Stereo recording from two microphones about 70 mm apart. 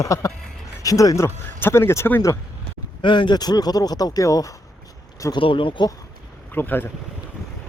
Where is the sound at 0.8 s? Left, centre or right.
Left.